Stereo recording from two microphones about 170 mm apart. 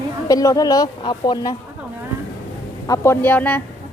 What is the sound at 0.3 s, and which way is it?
A woman's voice, 20° left (ahead or behind).